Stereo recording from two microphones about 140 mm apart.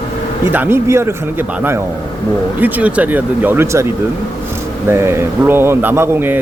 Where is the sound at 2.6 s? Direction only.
10° right (ahead or behind).